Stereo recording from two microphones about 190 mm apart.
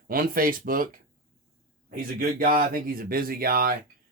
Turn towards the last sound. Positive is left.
turn(degrees=-50)  # may be behind; listen again after turning